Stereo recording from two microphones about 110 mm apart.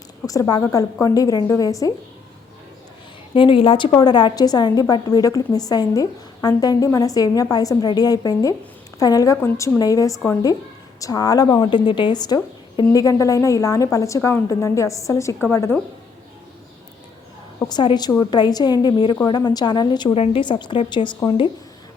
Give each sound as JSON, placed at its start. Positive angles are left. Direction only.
{"t": 0.3, "sound": "a woman's voice", "side_deg": 35}
{"t": 3.3, "sound": "a woman's voice", "side_deg": 50}
{"t": 3.9, "sound": "a woman's voice", "side_deg": 40}
{"t": 17.7, "sound": "a woman's voice", "side_deg": 40}
{"t": 20.1, "sound": "a woman's voice", "side_deg": 65}
{"t": 20.4, "sound": "a woman's voice", "side_deg": 45}